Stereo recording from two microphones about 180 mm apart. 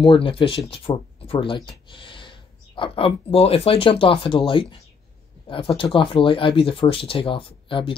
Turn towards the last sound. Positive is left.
turn(degrees=30)  # may be behind; listen again after turning